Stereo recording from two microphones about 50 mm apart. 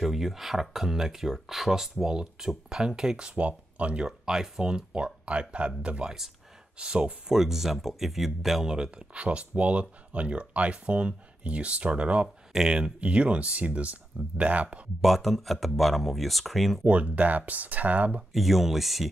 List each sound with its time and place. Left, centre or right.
0.0 s speech: centre; by 7.2 s right
7.2 s speech: centre
8.7 s speech: centre
15.0 s speech: centre
16.8 s speech: right
18.3 s speech: centre